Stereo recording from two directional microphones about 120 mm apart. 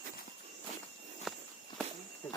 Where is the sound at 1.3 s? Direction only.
5° right (ahead or behind).